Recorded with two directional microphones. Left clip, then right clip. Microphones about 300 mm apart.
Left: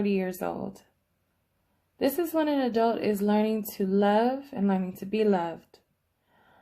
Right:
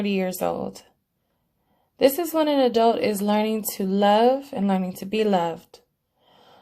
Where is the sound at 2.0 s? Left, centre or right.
Centre.